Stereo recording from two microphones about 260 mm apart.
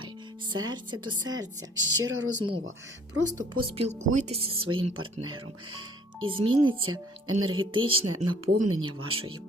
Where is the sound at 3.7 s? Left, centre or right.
Right.